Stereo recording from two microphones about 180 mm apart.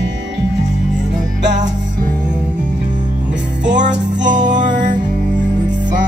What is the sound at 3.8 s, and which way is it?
Music, 45° right (ahead or behind).